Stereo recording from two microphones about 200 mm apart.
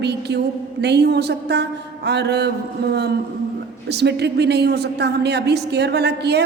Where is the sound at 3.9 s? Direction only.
55° right (ahead or behind).